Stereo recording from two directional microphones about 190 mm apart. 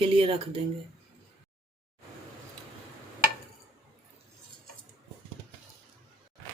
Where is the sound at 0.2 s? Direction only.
30° right (ahead or behind).